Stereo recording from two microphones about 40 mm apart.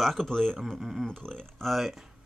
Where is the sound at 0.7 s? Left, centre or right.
Centre.